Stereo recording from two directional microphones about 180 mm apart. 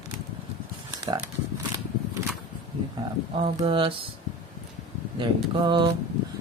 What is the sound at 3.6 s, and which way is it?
Speech, 30° right (ahead or behind).